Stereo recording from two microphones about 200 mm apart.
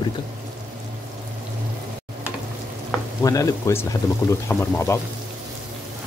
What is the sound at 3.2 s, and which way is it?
Speech, 15° left (ahead or behind).